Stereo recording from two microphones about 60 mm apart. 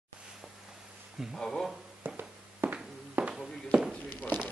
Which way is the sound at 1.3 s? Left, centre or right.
Centre.